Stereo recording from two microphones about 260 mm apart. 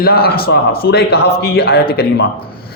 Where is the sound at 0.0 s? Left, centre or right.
Left.